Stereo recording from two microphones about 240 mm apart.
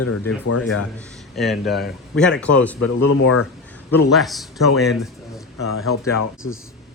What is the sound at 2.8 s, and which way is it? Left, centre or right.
Speech, left.